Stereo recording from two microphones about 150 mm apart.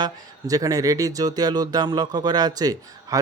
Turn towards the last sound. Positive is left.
turn(degrees=-25)  # may be behind; listen again after turning